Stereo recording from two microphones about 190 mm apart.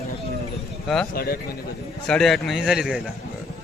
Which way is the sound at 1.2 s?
55° left (ahead or behind).